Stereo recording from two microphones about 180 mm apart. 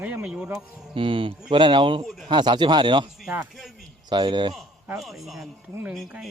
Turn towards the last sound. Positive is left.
turn(degrees=0)  # may be behind; listen again after turning